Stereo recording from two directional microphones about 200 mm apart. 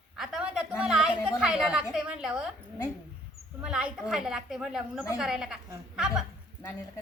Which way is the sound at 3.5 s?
5° right (ahead or behind).